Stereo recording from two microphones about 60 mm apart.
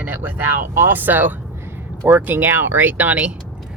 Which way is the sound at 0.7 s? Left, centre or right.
Right.